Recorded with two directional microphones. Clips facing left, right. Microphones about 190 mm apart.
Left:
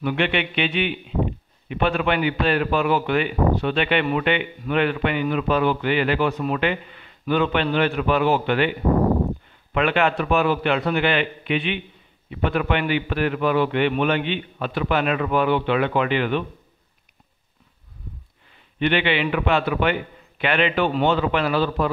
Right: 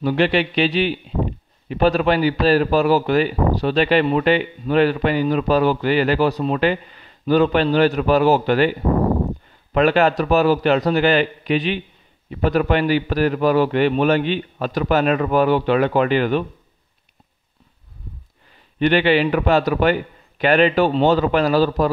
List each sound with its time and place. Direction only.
0.0 s a man's voice: 35° right (ahead or behind)
9.8 s a man's voice: 40° right (ahead or behind)
18.8 s a man's voice: 40° right (ahead or behind)